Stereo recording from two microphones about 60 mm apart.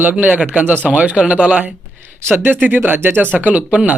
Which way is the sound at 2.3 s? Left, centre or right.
Right.